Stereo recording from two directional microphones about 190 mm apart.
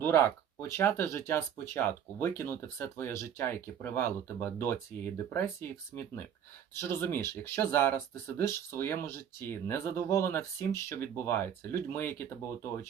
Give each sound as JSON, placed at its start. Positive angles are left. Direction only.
{"t": 0.0, "sound": "speech", "side_deg": 10}
{"t": 6.7, "sound": "speech", "side_deg": 10}